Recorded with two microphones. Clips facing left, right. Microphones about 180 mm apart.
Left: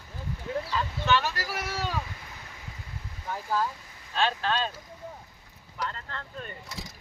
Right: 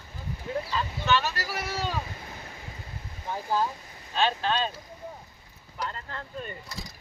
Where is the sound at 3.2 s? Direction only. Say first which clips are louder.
Right 2 dB; 25° right (ahead or behind).